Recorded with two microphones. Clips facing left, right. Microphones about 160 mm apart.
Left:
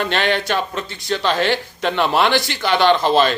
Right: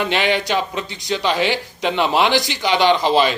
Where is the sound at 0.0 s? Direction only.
15° right (ahead or behind).